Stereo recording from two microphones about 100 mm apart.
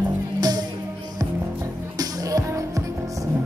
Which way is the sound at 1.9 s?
35° right (ahead or behind).